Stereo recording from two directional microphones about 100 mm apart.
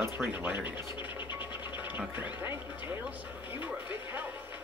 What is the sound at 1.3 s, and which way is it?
Music, 15° right (ahead or behind).